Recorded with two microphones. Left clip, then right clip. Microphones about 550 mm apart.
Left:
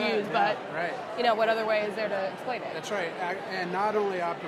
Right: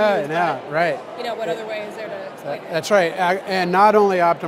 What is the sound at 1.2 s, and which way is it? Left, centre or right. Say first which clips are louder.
Speech: left 2 dB; left.